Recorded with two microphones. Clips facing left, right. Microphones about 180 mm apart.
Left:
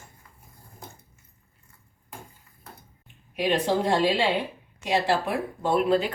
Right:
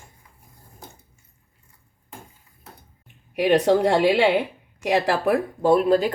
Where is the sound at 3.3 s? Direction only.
65° right (ahead or behind).